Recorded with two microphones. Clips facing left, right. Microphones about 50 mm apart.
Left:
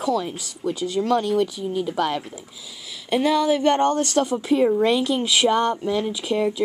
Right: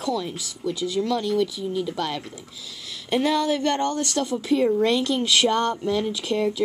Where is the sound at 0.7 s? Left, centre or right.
Left.